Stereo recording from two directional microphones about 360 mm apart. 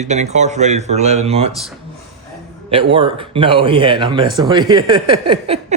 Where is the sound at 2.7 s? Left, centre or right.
Centre.